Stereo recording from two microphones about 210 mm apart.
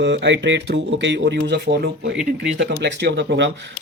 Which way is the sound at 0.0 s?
55° right (ahead or behind).